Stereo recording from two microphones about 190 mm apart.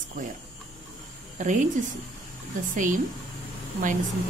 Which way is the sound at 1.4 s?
40° right (ahead or behind).